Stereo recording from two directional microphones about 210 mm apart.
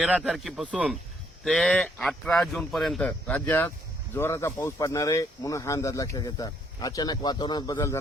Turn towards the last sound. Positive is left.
turn(degrees=15)  # may be behind; listen again after turning